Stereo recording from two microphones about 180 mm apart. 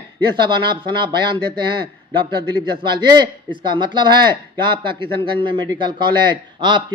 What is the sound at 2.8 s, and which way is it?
Speech, 25° right (ahead or behind).